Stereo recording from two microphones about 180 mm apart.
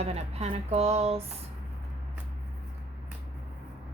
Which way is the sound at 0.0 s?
35° right (ahead or behind).